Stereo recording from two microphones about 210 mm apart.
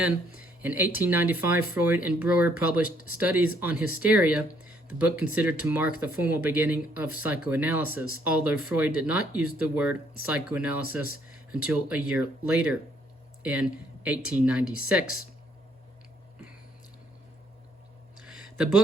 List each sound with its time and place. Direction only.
0.0 s speech: 5° right (ahead or behind)